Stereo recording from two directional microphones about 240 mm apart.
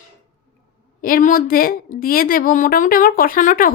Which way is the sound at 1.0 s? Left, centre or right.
Left.